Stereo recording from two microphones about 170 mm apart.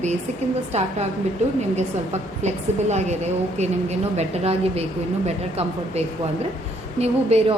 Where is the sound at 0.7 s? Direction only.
40° right (ahead or behind).